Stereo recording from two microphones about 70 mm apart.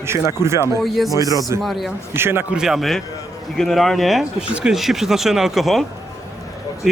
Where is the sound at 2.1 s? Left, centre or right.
Right.